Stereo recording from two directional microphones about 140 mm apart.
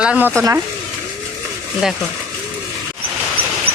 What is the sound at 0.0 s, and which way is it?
Speech, 5° right (ahead or behind).